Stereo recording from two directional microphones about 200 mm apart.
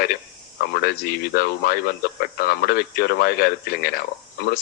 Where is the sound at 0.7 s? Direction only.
50° left (ahead or behind).